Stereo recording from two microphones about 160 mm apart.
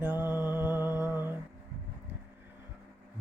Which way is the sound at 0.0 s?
10° right (ahead or behind).